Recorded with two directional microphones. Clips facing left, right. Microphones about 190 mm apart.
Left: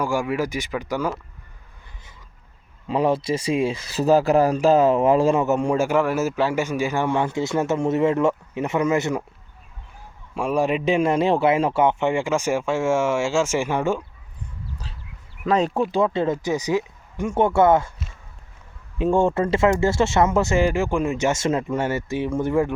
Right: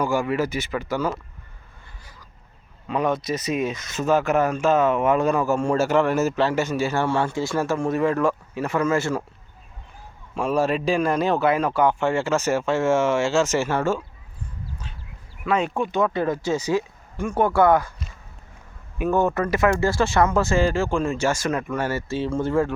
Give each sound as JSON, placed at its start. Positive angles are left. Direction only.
{"t": 0.0, "sound": "speech", "side_deg": 10}
{"t": 2.8, "sound": "speech", "side_deg": 30}
{"t": 10.3, "sound": "speech", "side_deg": 10}
{"t": 15.4, "sound": "speech", "side_deg": 35}
{"t": 18.9, "sound": "speech", "side_deg": 25}